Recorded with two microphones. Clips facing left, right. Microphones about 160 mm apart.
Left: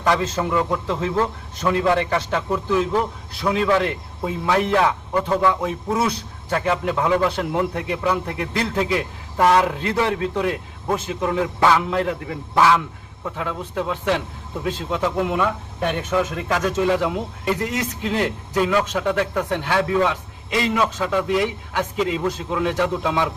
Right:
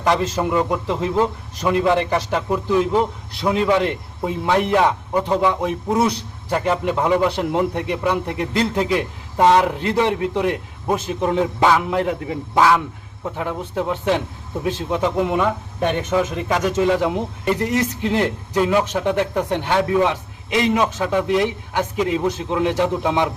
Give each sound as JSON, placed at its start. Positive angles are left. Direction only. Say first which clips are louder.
{"t": 0.0, "sound": "a man's voice", "louder": "right 2 dB", "side_deg": -15}